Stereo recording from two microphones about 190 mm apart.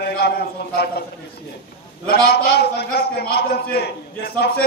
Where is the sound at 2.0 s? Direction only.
60° left (ahead or behind).